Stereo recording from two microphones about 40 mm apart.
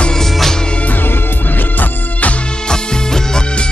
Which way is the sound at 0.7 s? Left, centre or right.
Left.